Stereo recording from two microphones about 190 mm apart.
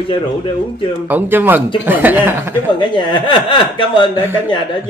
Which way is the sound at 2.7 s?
25° left (ahead or behind).